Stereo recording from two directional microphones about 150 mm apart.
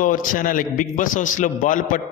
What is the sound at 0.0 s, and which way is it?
A man's voice, 65° left (ahead or behind).